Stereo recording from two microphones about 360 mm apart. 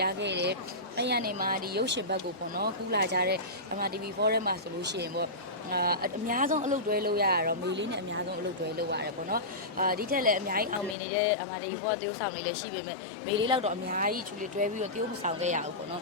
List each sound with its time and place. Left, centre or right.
0.0 s speech: right
13.4 s speech: centre